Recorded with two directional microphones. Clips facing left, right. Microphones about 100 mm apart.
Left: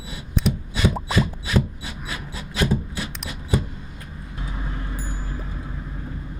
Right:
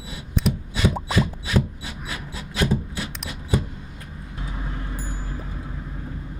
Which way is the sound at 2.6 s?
10° left (ahead or behind).